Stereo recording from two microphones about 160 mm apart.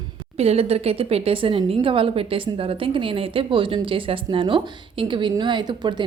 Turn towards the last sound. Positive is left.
turn(degrees=-25)  # may be behind; listen again after turning